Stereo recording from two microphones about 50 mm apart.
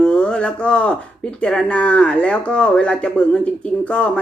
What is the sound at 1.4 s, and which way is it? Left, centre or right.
Speech, centre.